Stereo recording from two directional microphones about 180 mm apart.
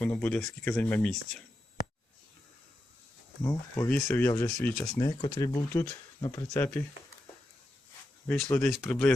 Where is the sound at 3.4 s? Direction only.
15° left (ahead or behind).